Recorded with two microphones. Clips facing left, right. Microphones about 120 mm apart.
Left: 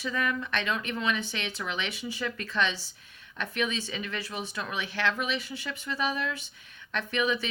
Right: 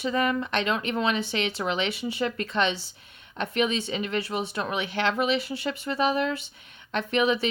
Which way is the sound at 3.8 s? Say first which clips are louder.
Right 7 dB; 30° right (ahead or behind).